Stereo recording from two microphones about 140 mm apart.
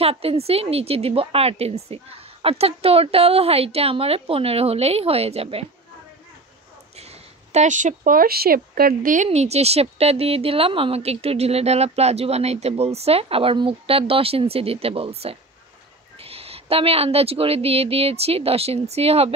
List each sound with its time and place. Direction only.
0.0 s speech: 45° right (ahead or behind)
7.0 s speech: 50° right (ahead or behind)